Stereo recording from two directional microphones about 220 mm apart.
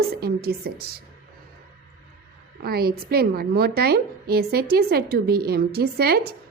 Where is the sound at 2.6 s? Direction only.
45° right (ahead or behind).